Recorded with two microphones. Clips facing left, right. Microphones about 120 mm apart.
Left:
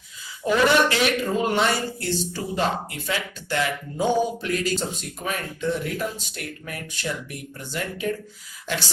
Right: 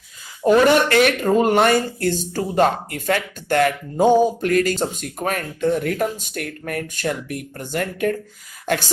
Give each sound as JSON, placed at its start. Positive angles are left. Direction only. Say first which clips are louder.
{"t": 0.4, "sound": "speech", "louder": "right 5 dB", "side_deg": -50}